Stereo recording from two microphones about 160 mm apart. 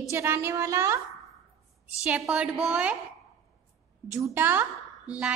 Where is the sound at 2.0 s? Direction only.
5° right (ahead or behind).